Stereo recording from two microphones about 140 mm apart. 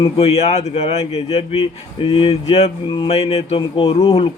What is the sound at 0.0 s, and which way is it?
A man's voice, 45° left (ahead or behind).